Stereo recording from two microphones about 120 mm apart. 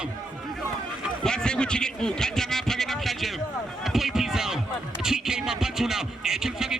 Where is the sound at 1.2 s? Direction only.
5° left (ahead or behind).